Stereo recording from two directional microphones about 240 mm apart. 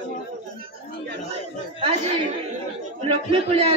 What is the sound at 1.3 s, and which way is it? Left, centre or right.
Chatter, right.